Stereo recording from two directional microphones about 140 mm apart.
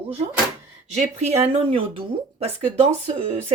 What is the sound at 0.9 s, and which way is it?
Speech, 50° right (ahead or behind).